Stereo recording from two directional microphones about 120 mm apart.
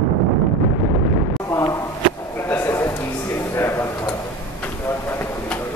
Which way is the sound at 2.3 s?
20° left (ahead or behind).